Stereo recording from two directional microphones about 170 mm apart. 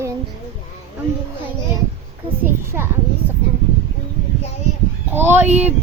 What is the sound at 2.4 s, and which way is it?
Female singing, 15° right (ahead or behind).